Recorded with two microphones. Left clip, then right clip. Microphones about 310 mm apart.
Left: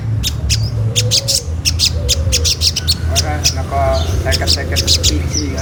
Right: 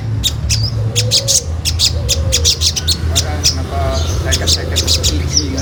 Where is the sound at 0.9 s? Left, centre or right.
Centre.